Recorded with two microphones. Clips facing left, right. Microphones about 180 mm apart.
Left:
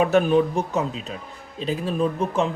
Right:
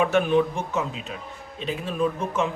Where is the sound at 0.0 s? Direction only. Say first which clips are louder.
Left 2 dB; 40° left (ahead or behind).